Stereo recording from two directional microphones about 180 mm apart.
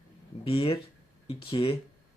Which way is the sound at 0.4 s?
30° left (ahead or behind).